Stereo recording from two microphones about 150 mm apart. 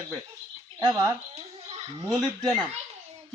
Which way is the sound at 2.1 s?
25° right (ahead or behind).